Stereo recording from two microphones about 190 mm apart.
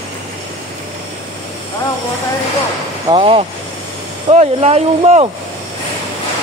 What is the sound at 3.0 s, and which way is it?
Speech, 25° right (ahead or behind).